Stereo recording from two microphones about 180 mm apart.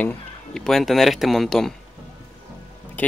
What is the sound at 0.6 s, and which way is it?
Speech, centre (ahead or behind).